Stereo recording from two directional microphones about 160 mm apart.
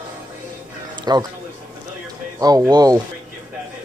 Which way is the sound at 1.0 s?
25° right (ahead or behind).